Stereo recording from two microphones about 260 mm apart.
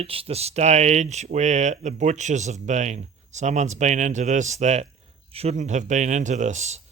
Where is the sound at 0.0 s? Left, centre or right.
Right.